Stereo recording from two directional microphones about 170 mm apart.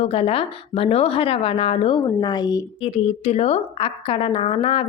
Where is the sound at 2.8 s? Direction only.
35° left (ahead or behind).